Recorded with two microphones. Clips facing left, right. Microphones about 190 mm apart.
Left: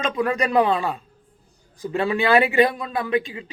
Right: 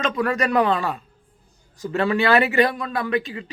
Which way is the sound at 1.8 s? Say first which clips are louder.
Right 1 dB; 15° left (ahead or behind).